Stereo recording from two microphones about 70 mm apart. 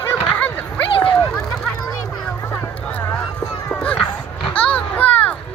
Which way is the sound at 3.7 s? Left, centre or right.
Centre.